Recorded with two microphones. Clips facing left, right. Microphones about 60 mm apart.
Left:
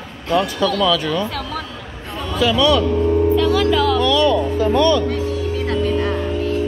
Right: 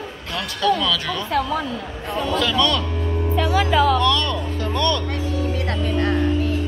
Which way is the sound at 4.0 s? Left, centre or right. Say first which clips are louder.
Left 5 dB; centre.